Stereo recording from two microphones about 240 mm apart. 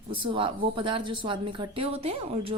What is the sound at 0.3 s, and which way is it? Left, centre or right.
Speech, right.